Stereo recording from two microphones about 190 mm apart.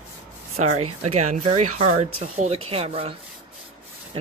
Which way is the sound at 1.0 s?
35° right (ahead or behind).